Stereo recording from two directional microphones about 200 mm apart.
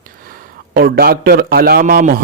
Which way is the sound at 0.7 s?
50° right (ahead or behind).